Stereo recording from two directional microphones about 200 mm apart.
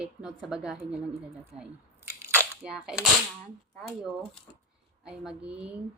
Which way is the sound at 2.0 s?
15° right (ahead or behind).